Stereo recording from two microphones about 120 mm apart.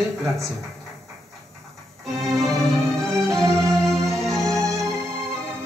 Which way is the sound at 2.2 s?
Centre (ahead or behind).